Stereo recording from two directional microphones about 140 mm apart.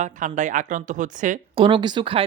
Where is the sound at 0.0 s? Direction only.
60° right (ahead or behind).